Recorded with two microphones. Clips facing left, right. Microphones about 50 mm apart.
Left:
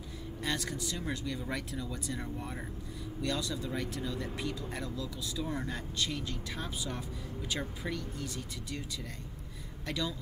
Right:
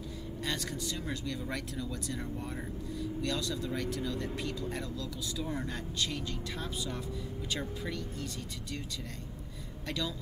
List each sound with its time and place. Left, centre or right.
0.4 s speech: centre
9.8 s speech: centre